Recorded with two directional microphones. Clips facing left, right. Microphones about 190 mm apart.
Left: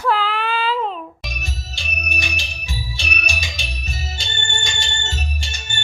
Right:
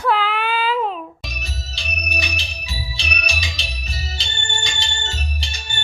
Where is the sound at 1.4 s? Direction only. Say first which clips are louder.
Even; 50° left (ahead or behind).